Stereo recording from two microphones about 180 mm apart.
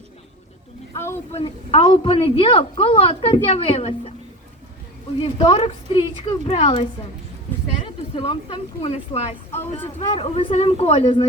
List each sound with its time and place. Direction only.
0.9 s a sound: 15° left (ahead or behind)
1.3 s a woman's voice: 35° left (ahead or behind)
5.2 s a woman's voice: 30° left (ahead or behind)
8.1 s a woman's voice: 30° left (ahead or behind)